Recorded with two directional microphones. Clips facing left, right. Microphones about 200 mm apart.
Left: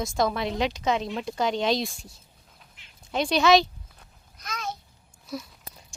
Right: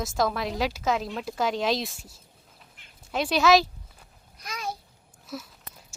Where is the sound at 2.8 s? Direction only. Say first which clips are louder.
Right 1 dB; 55° right (ahead or behind).